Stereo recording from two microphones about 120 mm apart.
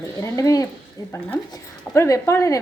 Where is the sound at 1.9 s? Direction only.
25° left (ahead or behind).